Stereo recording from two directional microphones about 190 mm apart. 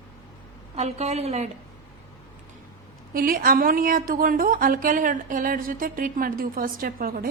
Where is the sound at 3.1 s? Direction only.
50° right (ahead or behind).